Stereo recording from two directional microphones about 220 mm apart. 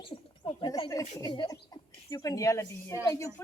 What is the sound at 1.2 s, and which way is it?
A woman's voice, 20° left (ahead or behind).